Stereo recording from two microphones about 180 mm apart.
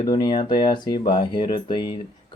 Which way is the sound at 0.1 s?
25° left (ahead or behind).